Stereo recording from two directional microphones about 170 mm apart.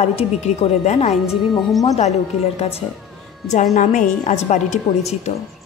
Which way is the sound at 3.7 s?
50° left (ahead or behind).